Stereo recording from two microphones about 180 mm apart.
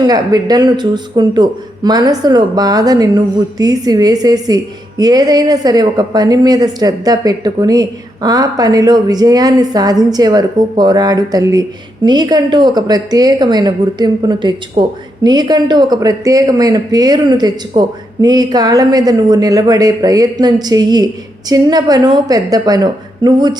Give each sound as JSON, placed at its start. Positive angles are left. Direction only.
{"t": 0.1, "sound": "speech", "side_deg": -20}